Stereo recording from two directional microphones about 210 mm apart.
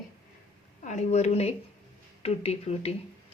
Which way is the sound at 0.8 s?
35° left (ahead or behind).